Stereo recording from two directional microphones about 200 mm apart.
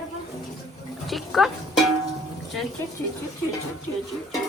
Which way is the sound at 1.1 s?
Centre (ahead or behind).